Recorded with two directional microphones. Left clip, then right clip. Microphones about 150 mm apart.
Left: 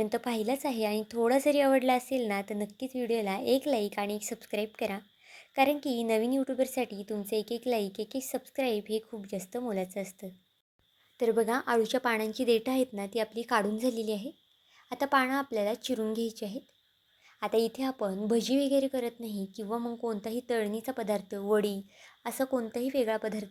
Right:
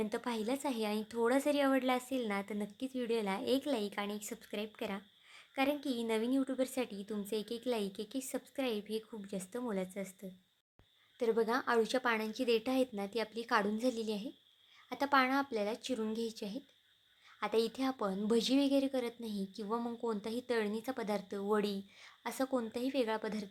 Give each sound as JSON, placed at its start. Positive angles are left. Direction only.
{"t": 0.0, "sound": "a woman's voice", "side_deg": 20}